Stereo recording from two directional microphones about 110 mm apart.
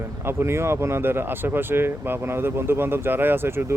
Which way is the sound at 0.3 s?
20° right (ahead or behind).